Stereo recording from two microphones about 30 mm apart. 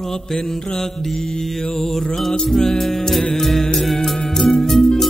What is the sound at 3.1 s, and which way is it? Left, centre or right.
Music, centre.